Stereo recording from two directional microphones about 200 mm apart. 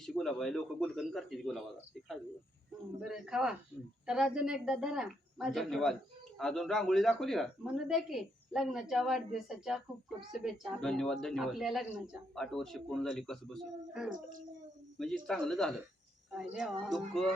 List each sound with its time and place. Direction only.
0.0 s speech: centre (ahead or behind)
3.0 s speech: 5° right (ahead or behind)
14.1 s a child's voice: 40° right (ahead or behind)
15.3 s speech: centre (ahead or behind)